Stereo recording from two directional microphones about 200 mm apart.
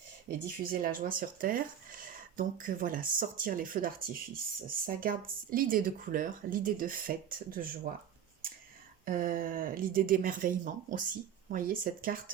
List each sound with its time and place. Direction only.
0.3 s speech: 45° right (ahead or behind)
9.0 s speech: 45° right (ahead or behind)